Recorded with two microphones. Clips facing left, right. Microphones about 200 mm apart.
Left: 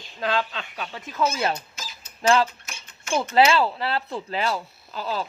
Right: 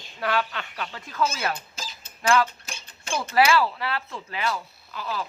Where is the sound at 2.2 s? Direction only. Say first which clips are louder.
Left 2 dB; 30° left (ahead or behind).